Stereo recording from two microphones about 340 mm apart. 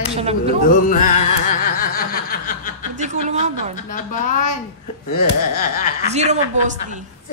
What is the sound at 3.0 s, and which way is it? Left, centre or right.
Speech, centre.